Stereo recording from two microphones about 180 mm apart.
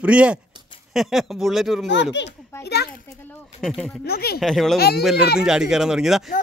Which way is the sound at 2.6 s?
65° left (ahead or behind).